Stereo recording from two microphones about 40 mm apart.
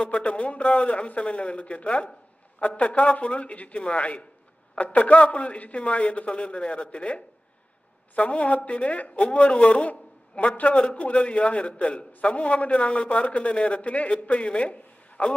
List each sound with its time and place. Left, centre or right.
0.0 s a man's voice: left